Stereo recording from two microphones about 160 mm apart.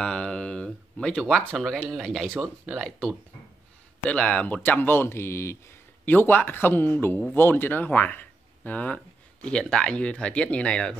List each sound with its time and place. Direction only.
0.0 s speech: 5° left (ahead or behind)